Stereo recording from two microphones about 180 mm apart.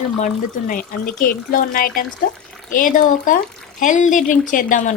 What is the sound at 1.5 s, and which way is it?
A woman's voice, 50° left (ahead or behind).